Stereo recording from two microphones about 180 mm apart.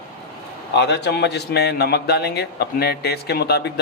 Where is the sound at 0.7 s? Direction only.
75° left (ahead or behind).